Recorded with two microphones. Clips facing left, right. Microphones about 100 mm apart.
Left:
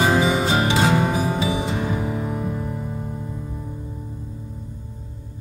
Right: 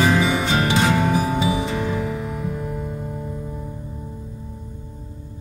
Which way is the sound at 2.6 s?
Centre (ahead or behind).